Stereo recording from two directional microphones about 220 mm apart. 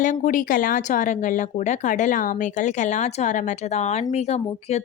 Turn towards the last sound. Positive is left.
turn(degrees=30)  # may be behind; listen again after turning